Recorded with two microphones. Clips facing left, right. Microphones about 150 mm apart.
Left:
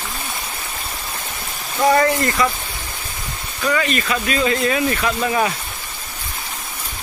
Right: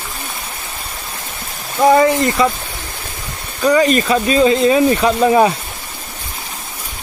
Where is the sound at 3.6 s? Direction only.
35° right (ahead or behind).